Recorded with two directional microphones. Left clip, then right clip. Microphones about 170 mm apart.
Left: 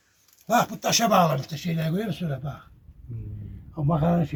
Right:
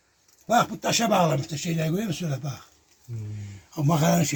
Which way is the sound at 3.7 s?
85° right.